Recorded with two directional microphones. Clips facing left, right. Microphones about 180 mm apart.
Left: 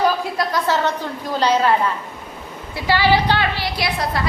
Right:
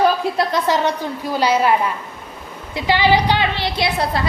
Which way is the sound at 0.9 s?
10° right (ahead or behind).